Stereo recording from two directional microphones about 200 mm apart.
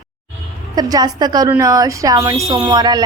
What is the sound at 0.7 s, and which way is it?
A woman's voice, 20° right (ahead or behind).